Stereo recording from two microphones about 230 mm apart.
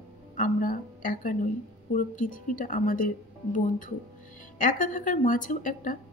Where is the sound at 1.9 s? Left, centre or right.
Left.